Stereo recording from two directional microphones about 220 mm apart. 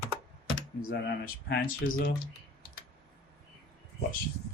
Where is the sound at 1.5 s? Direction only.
40° left (ahead or behind).